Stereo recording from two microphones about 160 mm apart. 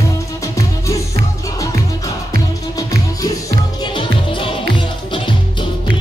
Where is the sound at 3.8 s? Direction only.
30° left (ahead or behind).